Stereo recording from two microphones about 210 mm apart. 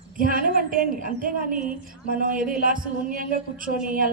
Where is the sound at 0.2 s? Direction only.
40° right (ahead or behind).